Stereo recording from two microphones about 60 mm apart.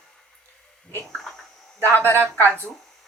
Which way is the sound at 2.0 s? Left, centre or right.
Right.